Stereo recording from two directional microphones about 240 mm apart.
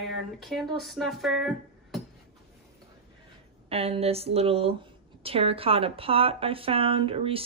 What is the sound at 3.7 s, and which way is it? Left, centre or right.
A woman's voice, right.